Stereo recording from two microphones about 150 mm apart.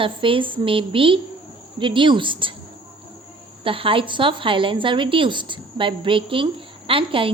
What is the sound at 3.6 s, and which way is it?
A woman's voice, 35° right (ahead or behind).